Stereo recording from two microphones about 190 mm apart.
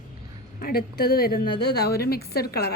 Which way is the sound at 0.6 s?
50° left (ahead or behind).